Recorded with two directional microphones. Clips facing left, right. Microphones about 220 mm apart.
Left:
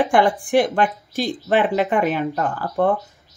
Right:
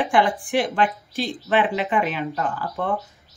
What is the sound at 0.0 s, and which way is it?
A woman's voice, 45° left (ahead or behind).